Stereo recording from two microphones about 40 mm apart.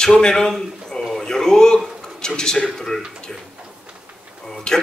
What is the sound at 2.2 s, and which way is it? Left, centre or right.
Speech, centre.